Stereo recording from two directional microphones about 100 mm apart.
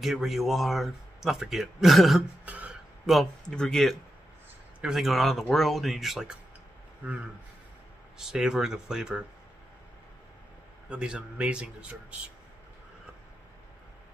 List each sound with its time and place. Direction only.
0.0 s a man's voice: 5° right (ahead or behind)
2.4 s throat clearing: 15° right (ahead or behind)
3.1 s a man's voice: 5° left (ahead or behind)
7.0 s speech: 20° right (ahead or behind)
8.2 s a man's voice: 5° right (ahead or behind)
10.9 s a man's voice: 10° right (ahead or behind)